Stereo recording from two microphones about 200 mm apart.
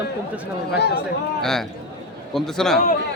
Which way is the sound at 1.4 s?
Centre (ahead or behind).